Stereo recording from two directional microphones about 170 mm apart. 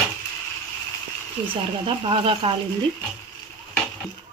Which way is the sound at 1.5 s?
30° right (ahead or behind).